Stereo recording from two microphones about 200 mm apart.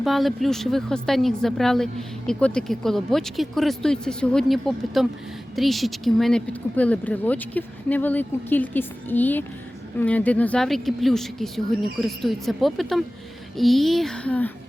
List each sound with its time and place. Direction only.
0.0 s speech: centre (ahead or behind)